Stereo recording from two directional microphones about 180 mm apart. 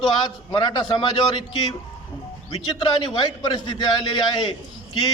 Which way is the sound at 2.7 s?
25° left (ahead or behind).